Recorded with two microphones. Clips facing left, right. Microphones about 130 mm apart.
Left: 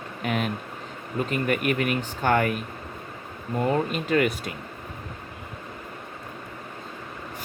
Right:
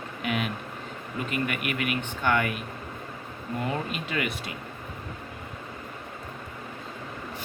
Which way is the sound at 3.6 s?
45° left (ahead or behind).